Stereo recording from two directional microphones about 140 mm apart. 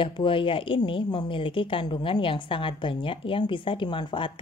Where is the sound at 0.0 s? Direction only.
35° left (ahead or behind).